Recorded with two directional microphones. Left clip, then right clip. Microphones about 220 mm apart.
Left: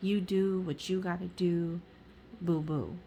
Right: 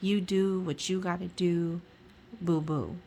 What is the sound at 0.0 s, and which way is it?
A woman's voice, 15° right (ahead or behind).